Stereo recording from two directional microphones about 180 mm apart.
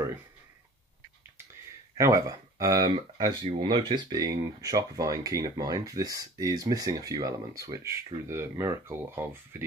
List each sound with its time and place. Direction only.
2.0 s speech: 15° right (ahead or behind)